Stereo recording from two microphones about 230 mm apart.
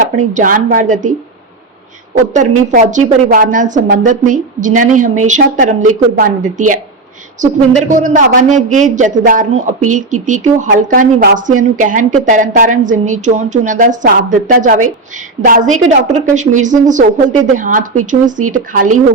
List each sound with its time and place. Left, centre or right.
0.0 s speech: right
2.6 s speech: right